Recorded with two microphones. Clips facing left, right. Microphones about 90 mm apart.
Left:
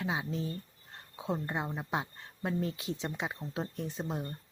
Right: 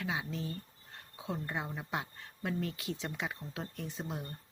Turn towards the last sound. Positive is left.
turn(degrees=30)  # may be behind; listen again after turning